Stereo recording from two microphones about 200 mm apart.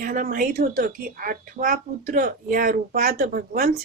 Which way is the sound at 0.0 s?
40° right (ahead or behind).